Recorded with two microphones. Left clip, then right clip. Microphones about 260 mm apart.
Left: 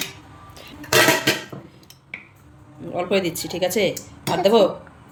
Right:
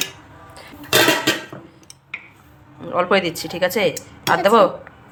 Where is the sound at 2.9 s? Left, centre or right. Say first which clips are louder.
Right 5 dB; right.